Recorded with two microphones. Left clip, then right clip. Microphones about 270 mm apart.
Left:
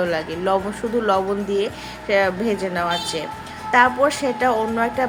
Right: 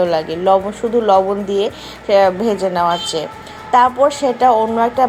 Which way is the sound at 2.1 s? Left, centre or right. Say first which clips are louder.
Right 7 dB; centre.